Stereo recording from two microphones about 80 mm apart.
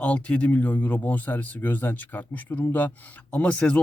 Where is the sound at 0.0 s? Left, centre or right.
Centre.